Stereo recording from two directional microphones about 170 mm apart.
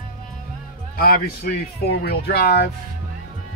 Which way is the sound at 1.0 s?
65° left (ahead or behind).